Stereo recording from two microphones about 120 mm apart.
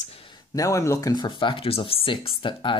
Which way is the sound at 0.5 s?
25° left (ahead or behind).